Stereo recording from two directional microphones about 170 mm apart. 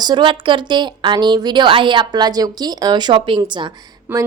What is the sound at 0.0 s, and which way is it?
Speech, 25° right (ahead or behind).